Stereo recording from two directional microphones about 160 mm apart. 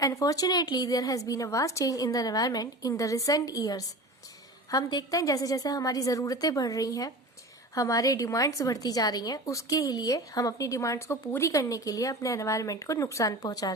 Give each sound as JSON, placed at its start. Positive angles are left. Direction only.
{"t": 0.0, "sound": "a woman's voice", "side_deg": 20}